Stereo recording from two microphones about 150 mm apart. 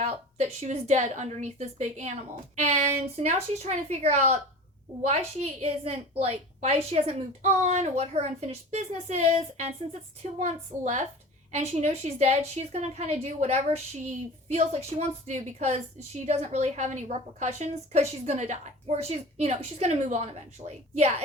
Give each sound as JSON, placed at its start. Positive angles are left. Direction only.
{"t": 0.0, "sound": "a woman's voice", "side_deg": -45}